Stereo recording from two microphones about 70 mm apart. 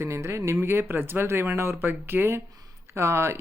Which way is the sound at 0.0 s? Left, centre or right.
Right.